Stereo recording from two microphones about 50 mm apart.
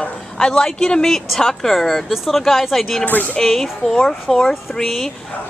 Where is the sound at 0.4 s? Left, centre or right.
Centre.